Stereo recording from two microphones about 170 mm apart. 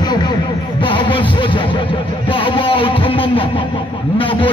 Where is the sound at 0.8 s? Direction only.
30° left (ahead or behind).